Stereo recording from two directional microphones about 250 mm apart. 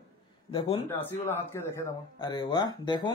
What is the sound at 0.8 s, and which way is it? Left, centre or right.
Speech, centre.